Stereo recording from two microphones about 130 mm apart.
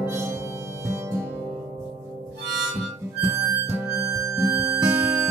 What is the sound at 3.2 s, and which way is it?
Harmonica, 20° right (ahead or behind).